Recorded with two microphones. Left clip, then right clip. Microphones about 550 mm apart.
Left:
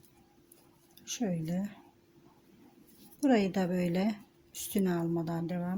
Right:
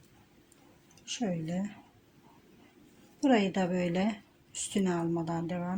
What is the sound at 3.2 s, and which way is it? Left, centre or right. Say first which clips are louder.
Speech: right 1 dB; left.